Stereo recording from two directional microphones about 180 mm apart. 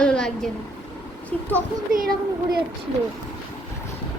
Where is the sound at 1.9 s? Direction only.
50° right (ahead or behind).